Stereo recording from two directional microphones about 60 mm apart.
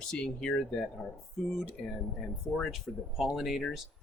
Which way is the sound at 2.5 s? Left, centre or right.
Centre.